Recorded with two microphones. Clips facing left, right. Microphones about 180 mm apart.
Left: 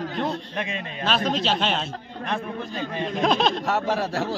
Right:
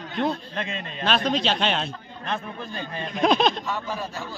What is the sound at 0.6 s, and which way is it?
Speech, 15° left (ahead or behind).